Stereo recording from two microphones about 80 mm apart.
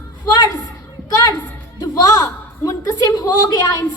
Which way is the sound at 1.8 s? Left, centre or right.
Left.